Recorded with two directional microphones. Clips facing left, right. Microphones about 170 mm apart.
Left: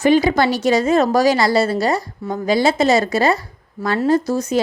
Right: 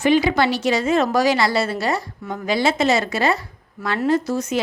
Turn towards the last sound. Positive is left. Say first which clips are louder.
# left 3 dB
turn(degrees=35)  # may be behind; listen again after turning